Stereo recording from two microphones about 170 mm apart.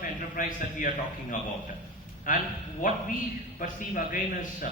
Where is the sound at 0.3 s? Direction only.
50° left (ahead or behind).